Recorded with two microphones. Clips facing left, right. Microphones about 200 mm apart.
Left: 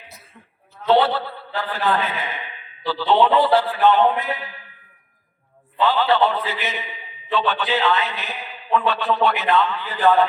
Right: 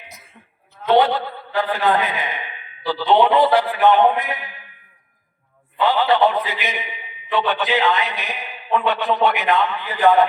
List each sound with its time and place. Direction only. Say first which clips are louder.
0.9 s a man's voice: right 1 dB; 15° right (ahead or behind)
5.8 s a man's voice: right 2 dB; 15° right (ahead or behind)